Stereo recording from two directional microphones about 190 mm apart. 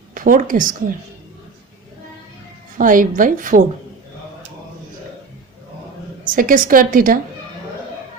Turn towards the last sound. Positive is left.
turn(degrees=-45)  # may be behind; listen again after turning